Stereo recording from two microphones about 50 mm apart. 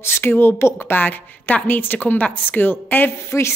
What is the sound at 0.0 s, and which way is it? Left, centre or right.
Speech, left.